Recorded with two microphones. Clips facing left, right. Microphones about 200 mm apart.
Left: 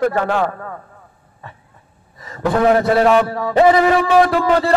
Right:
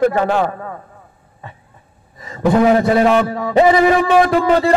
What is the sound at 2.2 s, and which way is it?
A man's voice, 20° right (ahead or behind).